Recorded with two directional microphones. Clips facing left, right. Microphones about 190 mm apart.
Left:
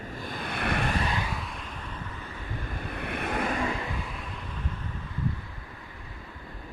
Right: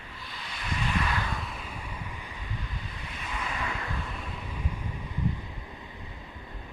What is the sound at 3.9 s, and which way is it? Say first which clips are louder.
Vehicle: even; centre (ahead or behind).